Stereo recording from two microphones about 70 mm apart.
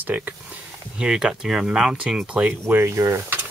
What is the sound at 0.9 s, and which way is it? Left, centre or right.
Speech, centre.